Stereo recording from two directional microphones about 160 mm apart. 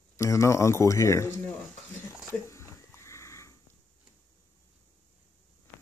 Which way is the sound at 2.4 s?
15° left (ahead or behind).